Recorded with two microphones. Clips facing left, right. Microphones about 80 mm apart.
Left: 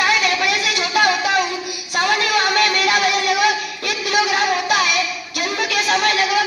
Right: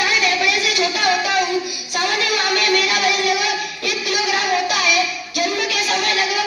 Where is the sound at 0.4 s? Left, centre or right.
Left.